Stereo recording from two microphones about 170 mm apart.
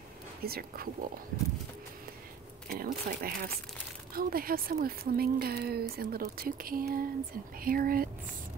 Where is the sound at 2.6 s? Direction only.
60° right (ahead or behind).